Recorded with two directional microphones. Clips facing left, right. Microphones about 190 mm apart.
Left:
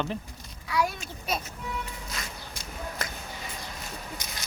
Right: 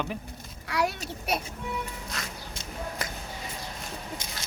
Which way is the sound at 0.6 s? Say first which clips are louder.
Even; 70° right (ahead or behind).